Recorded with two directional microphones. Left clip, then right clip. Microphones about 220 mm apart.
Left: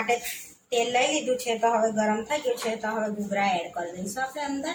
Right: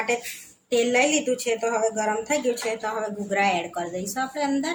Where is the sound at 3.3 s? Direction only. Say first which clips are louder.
Right 4 dB; 40° right (ahead or behind).